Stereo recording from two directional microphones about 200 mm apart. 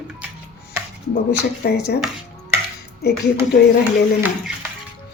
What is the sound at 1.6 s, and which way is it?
Speech, 55° left (ahead or behind).